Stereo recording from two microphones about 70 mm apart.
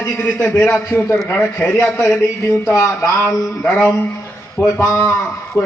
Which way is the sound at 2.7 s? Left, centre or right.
Left.